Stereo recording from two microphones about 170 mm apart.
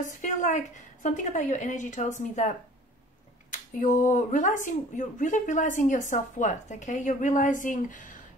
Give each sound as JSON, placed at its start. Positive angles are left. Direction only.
{"t": 0.0, "sound": "speech", "side_deg": 45}
{"t": 3.8, "sound": "speech", "side_deg": 50}